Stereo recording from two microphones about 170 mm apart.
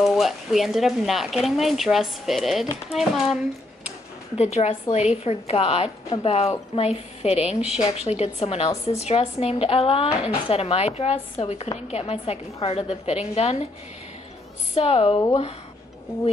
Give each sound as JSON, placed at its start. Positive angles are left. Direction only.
{"t": 0.0, "sound": "speech", "side_deg": 0}
{"t": 4.4, "sound": "speech", "side_deg": 40}
{"t": 14.8, "sound": "speech", "side_deg": 35}